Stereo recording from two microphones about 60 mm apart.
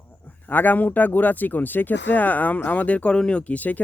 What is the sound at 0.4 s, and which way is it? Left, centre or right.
Speech, left.